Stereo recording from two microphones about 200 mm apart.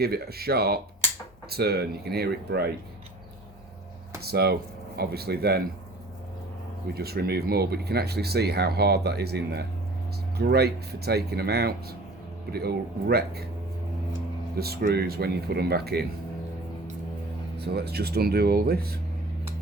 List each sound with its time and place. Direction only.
0.0 s speech: 50° right (ahead or behind)
4.3 s speech: 50° right (ahead or behind)
6.9 s speech: 50° right (ahead or behind)
14.6 s speech: 50° right (ahead or behind)
17.6 s speech: 55° right (ahead or behind)